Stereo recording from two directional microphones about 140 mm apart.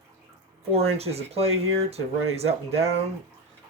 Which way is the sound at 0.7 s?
45° right (ahead or behind).